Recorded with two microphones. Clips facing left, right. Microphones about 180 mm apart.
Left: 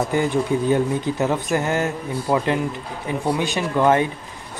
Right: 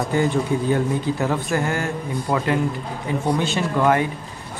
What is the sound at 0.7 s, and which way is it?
Speech, 20° left (ahead or behind).